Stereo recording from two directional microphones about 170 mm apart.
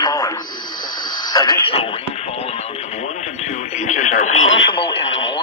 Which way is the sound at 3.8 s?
45° left (ahead or behind).